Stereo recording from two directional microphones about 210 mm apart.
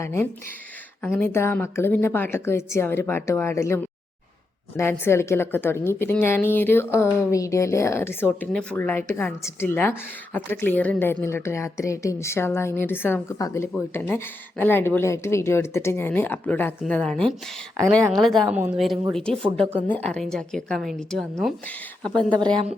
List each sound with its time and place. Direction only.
0.0 s a woman's voice: 10° left (ahead or behind)
4.8 s a woman's voice: 10° left (ahead or behind)
22.4 s speech: 20° right (ahead or behind)